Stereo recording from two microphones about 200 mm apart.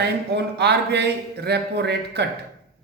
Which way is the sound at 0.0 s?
55° right (ahead or behind).